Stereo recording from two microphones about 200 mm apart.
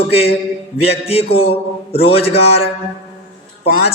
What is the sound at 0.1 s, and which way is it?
A man's voice, 30° left (ahead or behind).